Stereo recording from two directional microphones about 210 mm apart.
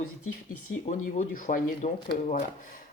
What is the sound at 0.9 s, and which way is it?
Speech, 35° left (ahead or behind).